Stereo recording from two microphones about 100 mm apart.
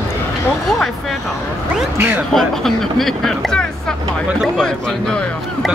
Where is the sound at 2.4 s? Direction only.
Centre (ahead or behind).